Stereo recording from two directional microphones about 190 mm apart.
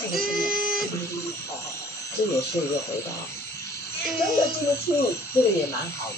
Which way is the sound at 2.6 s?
15° left (ahead or behind).